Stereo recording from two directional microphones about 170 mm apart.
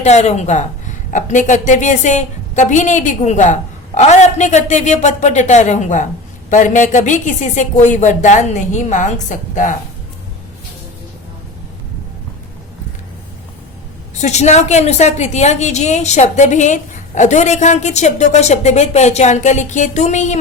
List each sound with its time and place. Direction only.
0.0 s a woman's voice: 40° left (ahead or behind)
14.2 s a woman's voice: 40° left (ahead or behind)